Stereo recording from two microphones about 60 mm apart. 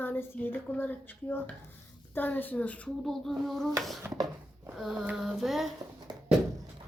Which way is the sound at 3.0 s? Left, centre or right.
Centre.